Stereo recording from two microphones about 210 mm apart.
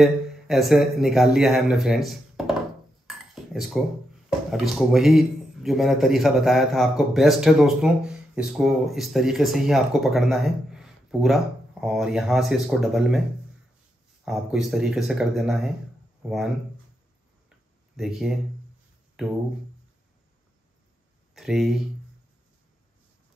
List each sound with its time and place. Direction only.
0.0 s speech: centre (ahead or behind)
3.1 s dishes: centre (ahead or behind)
4.3 s speech: centre (ahead or behind)
14.2 s speech: centre (ahead or behind)
17.5 s a sound: centre (ahead or behind)
19.2 s speech: centre (ahead or behind)
21.4 s speech: centre (ahead or behind)